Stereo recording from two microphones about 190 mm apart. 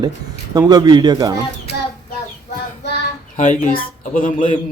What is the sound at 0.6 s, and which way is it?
Speech, 20° right (ahead or behind).